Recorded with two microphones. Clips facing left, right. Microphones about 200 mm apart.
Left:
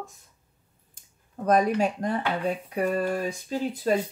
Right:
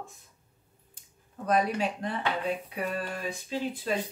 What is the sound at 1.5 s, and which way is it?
Speech, 45° left (ahead or behind).